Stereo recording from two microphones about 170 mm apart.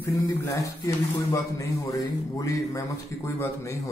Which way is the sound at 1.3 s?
20° left (ahead or behind).